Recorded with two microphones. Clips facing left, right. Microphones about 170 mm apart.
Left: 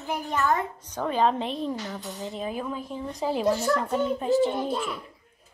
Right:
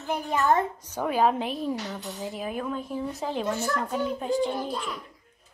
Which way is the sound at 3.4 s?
30° left (ahead or behind).